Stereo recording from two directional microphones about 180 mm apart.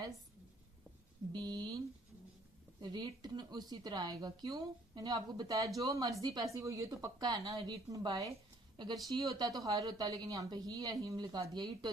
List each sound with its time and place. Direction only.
1.3 s speech: 25° right (ahead or behind)
2.8 s speech: 25° right (ahead or behind)